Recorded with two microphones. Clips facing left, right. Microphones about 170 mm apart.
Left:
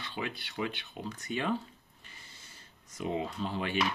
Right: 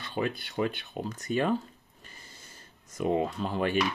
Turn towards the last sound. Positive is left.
turn(degrees=-45)  # may be behind; listen again after turning